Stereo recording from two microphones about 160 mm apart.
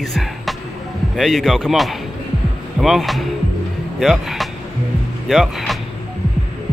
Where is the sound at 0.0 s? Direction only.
Centre (ahead or behind).